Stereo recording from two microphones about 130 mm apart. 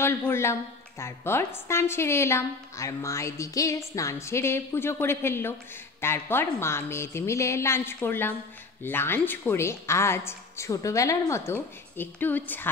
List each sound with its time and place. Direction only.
0.0 s a woman's voice: 20° left (ahead or behind)